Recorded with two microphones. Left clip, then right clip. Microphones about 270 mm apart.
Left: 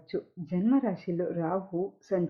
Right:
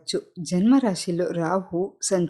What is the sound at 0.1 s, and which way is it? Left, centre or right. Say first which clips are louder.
Speech: right 7 dB; right.